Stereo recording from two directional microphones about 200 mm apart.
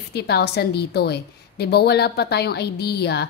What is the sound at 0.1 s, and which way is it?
A woman's voice, 55° left (ahead or behind).